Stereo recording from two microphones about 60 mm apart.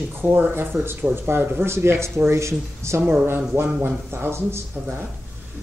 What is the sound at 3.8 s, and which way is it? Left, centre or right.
Speech, right.